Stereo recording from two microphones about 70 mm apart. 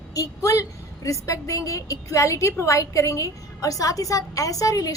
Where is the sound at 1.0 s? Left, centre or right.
Left.